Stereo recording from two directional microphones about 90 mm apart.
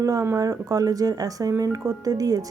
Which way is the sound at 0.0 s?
40° right (ahead or behind).